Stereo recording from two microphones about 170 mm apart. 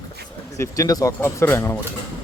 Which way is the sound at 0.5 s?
20° left (ahead or behind).